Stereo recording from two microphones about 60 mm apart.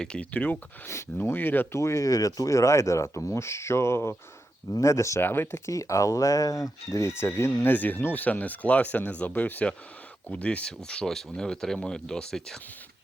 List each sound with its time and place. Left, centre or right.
0.0 s speech: centre
1.2 s speech: left
1.7 s speech: left
5.2 s speech: left
5.6 s speech: left
7.2 s speech: left
7.7 s speech: left; by 12.5 s centre